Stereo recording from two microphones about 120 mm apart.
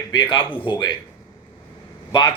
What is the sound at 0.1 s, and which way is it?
Speech, 40° left (ahead or behind).